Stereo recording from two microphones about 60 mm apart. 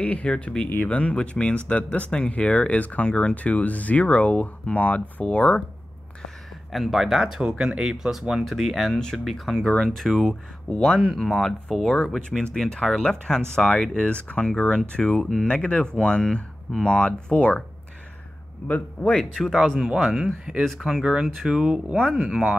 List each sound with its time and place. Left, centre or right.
0.0 s speech: centre
6.2 s speech: centre
8.5 s speech: centre
18.7 s speech: left
19.1 s speech: centre